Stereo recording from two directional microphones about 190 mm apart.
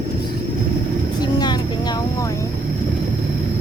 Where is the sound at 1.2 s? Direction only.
20° left (ahead or behind).